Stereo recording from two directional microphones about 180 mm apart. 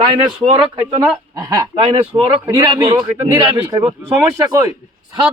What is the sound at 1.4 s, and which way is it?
Speech, 20° right (ahead or behind).